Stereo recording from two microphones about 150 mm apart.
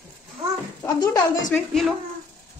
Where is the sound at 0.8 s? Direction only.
25° left (ahead or behind).